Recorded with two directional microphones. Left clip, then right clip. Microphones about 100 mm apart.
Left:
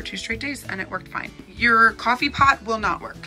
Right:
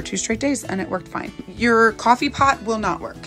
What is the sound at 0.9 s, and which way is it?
Speech, 40° right (ahead or behind).